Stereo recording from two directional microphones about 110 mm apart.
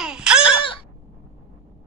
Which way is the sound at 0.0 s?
5° right (ahead or behind).